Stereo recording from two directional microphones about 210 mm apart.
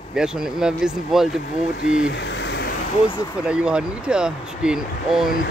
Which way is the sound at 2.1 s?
55° left (ahead or behind).